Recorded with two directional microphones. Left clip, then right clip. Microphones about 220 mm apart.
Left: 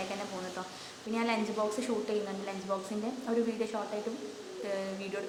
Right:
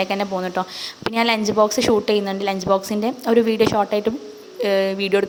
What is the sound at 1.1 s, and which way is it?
A woman's voice, 45° right (ahead or behind).